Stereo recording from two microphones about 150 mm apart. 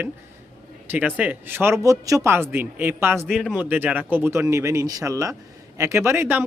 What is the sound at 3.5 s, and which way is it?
Speech, 10° right (ahead or behind).